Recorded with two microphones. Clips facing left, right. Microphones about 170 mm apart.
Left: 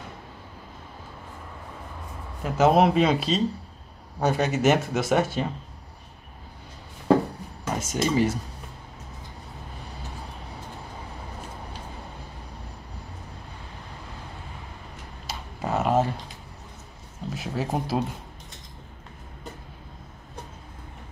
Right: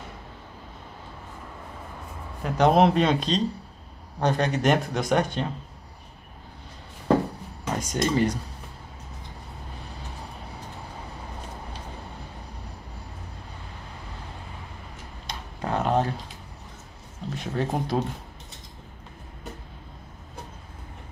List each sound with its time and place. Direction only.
2.4 s speech: 5° left (ahead or behind)
7.9 s speech: 5° left (ahead or behind)
15.2 s a sound: 5° left (ahead or behind)
17.3 s speech: 5° left (ahead or behind)